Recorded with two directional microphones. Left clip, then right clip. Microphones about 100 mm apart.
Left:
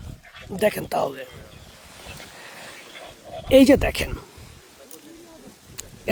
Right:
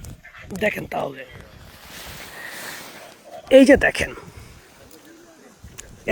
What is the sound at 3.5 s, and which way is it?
Speech, centre (ahead or behind).